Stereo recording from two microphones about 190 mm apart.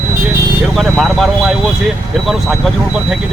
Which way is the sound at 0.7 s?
Centre (ahead or behind).